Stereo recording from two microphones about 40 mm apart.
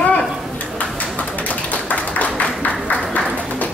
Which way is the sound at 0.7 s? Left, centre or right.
Left.